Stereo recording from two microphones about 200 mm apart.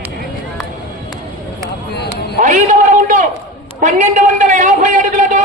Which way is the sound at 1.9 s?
55° left (ahead or behind).